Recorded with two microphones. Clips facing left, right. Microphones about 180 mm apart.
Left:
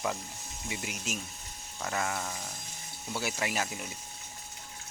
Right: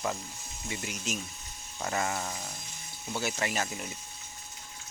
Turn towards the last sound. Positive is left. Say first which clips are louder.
# right 1 dB
turn(degrees=5)  # may be behind; listen again after turning